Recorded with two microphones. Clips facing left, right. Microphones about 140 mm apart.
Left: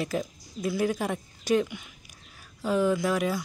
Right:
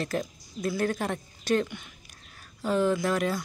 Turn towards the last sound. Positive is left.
turn(degrees=5)  # may be behind; listen again after turning